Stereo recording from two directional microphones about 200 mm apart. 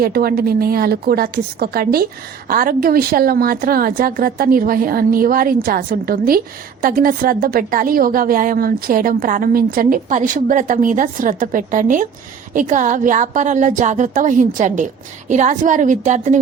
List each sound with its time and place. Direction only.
0.0 s a woman's voice: 50° right (ahead or behind)